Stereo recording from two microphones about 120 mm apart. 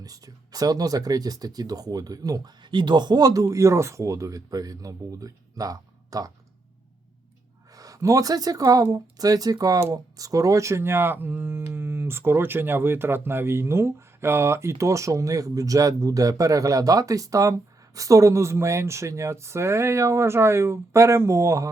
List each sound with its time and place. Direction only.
0.0 s speech: 30° right (ahead or behind)
7.7 s speech: 30° right (ahead or behind)